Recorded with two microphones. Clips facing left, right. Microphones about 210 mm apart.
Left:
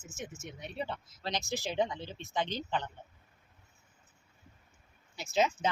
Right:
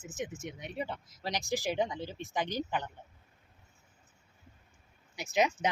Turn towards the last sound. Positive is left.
turn(degrees=-15)  # may be behind; listen again after turning